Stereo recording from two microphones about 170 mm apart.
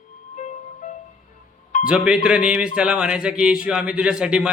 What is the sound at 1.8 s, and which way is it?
Speech, 5° right (ahead or behind).